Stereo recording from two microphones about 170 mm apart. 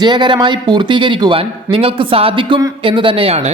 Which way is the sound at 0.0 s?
25° right (ahead or behind).